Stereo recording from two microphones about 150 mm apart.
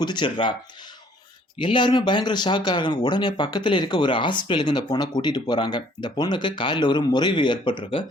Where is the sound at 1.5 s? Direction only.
30° left (ahead or behind).